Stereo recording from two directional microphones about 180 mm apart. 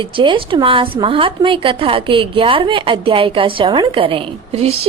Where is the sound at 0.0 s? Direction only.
30° right (ahead or behind).